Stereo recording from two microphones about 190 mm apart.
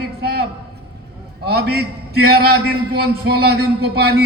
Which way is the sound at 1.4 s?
55° right (ahead or behind).